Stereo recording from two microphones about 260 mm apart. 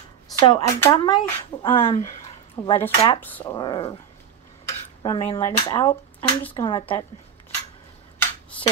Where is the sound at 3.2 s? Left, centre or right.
Centre.